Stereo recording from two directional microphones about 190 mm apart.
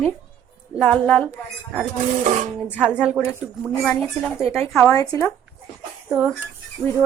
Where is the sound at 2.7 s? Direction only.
5° right (ahead or behind).